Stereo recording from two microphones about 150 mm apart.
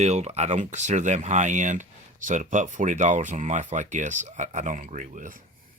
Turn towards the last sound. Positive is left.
turn(degrees=-60)  # may be behind; listen again after turning